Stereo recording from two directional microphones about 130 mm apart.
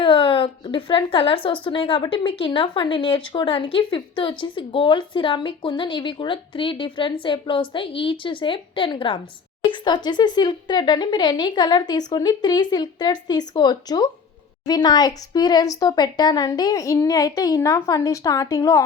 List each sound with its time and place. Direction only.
0.0 s a woman's voice: 40° left (ahead or behind); by 18.9 s 25° left (ahead or behind)